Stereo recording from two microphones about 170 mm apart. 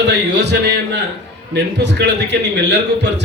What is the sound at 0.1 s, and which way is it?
A man's voice, 90° right.